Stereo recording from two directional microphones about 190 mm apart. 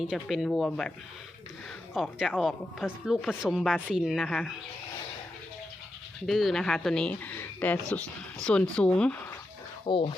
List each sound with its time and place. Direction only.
0.0 s speech: centre (ahead or behind)
6.2 s speech: centre (ahead or behind)
9.8 s speech: 25° left (ahead or behind)